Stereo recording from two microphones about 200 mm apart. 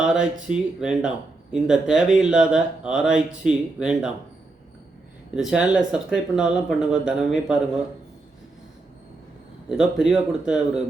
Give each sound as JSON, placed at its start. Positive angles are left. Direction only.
{"t": 0.0, "sound": "speech", "side_deg": -5}
{"t": 5.3, "sound": "speech", "side_deg": -5}
{"t": 9.6, "sound": "speech", "side_deg": -5}